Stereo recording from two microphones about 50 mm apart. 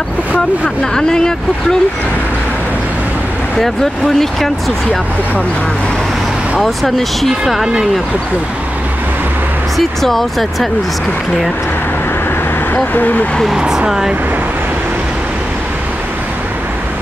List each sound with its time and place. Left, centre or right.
0.9 s speech: centre
4.2 s speech: centre
6.6 s speech: centre
9.8 s speech: centre
12.9 s speech: left
13.6 s speech: centre